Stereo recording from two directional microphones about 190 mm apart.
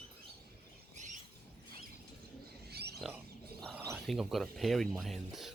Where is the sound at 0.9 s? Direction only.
40° right (ahead or behind).